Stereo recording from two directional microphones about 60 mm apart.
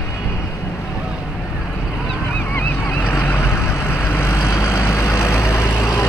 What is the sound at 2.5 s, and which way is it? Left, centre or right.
Vehicle, left.